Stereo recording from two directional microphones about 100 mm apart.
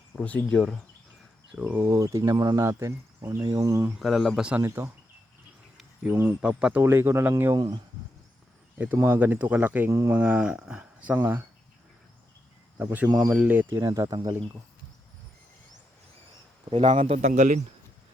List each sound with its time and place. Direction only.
0.2 s speech: 15° left (ahead or behind)
1.5 s speech: 20° right (ahead or behind)
4.0 s speech: centre (ahead or behind)
4.6 s speech: 30° right (ahead or behind)
5.7 s insect: 10° right (ahead or behind)
6.4 s speech: 10° right (ahead or behind)
6.8 s speech: 25° right (ahead or behind)
7.5 s speech: 50° right (ahead or behind)
9.0 s speech: 20° right (ahead or behind)
10.2 s speech: 15° right (ahead or behind)
12.8 s speech: 15° right (ahead or behind)
13.1 s speech: 35° right (ahead or behind)
13.3 s speech: 15° right (ahead or behind); by 14.3 s 35° right (ahead or behind)
16.7 s speech: 90° right